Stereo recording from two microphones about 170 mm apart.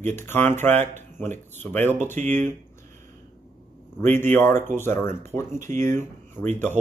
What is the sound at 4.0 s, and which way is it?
Speech, 10° left (ahead or behind).